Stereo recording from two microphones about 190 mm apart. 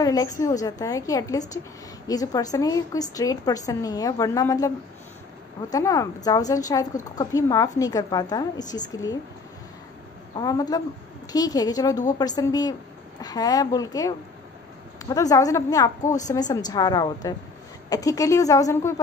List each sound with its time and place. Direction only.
0.0 s a woman's voice: 20° left (ahead or behind)
10.3 s a woman's voice: 20° left (ahead or behind)
16.0 s a woman's voice: 40° left (ahead or behind)
16.3 s a woman's voice: 20° left (ahead or behind)